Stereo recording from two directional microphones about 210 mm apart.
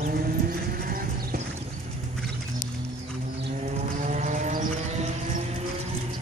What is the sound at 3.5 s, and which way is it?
Vehicle, 35° right (ahead or behind).